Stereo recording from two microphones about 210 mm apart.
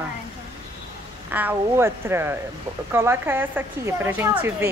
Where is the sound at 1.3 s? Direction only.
10° right (ahead or behind).